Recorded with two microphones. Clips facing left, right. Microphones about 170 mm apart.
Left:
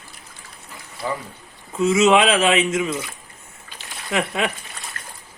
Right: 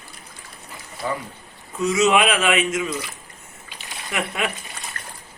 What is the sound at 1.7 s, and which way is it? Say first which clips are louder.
A man's voice: left 3 dB; 25° left (ahead or behind).